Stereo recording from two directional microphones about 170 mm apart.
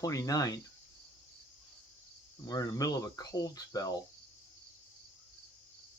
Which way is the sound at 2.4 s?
20° left (ahead or behind).